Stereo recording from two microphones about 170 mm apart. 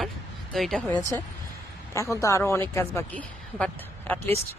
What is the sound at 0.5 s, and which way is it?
Speech, centre (ahead or behind).